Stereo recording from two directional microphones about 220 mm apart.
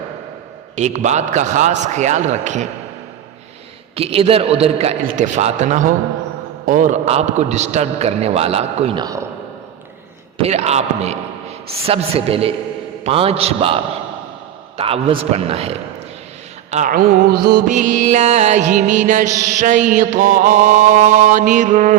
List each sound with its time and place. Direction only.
0.8 s music: 30° right (ahead or behind)
3.9 s a man's voice: 25° right (ahead or behind)
5.0 s music: 35° right (ahead or behind)
6.7 s a man's voice: 35° right (ahead or behind); by 9.2 s 20° right (ahead or behind)
10.4 s a man's voice: 30° right (ahead or behind)
14.8 s a man's voice: 25° right (ahead or behind)
16.7 s music: 40° right (ahead or behind)